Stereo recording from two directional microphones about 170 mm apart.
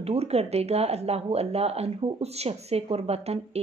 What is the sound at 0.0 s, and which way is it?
Speech, 35° right (ahead or behind).